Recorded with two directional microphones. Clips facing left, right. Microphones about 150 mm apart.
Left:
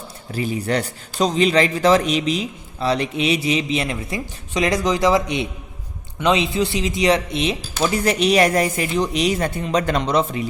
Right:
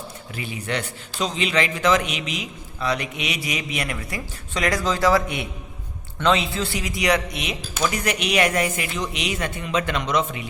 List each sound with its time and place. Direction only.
0.3 s a man's voice: 40° left (ahead or behind)